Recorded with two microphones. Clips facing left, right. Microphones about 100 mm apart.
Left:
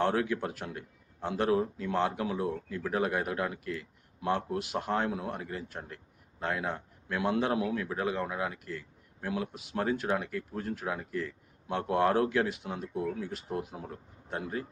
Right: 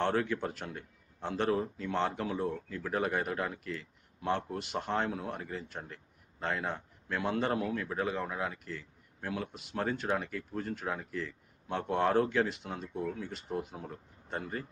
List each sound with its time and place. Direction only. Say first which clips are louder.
0.0 s a man's voice: left 2 dB; 5° left (ahead or behind)